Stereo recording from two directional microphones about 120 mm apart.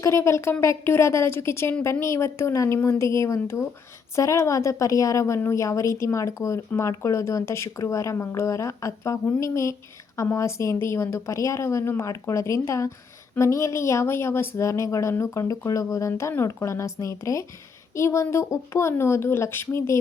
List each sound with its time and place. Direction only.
0.0 s a woman's voice: 25° left (ahead or behind)